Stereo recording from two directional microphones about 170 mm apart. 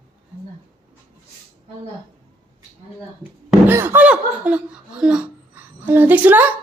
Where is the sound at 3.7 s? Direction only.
10° right (ahead or behind).